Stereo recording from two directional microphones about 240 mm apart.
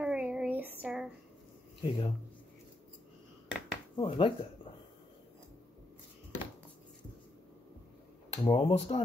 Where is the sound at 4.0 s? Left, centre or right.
Left.